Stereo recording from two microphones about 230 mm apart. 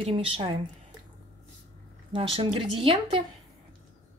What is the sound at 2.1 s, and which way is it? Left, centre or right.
Speech, right.